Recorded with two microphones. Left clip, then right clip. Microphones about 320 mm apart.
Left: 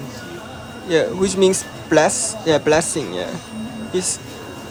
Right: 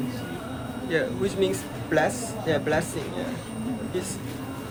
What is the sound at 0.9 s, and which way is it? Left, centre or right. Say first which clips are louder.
Speech: left 9 dB; centre.